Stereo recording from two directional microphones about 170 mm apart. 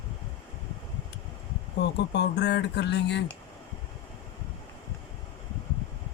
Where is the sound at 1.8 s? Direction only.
85° left.